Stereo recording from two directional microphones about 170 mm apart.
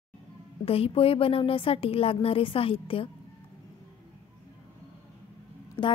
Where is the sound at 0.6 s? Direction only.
35° left (ahead or behind).